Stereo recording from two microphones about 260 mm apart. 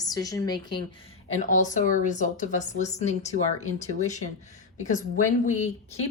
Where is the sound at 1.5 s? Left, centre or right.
Left.